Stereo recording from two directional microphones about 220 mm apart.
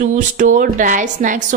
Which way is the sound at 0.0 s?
35° right (ahead or behind).